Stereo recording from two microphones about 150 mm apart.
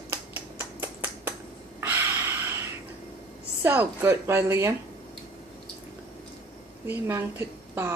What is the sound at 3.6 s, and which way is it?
A woman's voice, 15° right (ahead or behind).